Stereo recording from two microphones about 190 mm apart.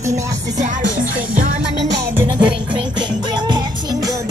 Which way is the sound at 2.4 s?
25° right (ahead or behind).